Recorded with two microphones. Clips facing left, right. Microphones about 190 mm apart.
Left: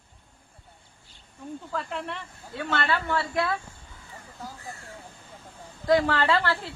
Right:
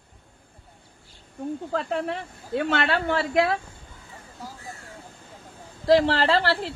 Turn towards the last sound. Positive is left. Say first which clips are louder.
# right 3 dB
turn(degrees=-35)  # may be behind; listen again after turning